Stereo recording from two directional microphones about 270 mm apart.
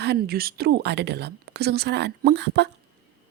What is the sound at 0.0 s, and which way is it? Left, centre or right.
Speech, right.